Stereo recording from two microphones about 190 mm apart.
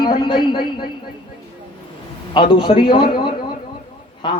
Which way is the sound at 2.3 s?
25° left (ahead or behind).